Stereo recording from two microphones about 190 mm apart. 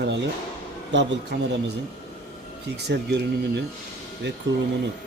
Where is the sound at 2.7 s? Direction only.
60° right (ahead or behind).